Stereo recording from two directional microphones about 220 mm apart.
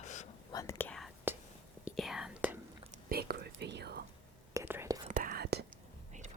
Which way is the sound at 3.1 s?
45° right (ahead or behind).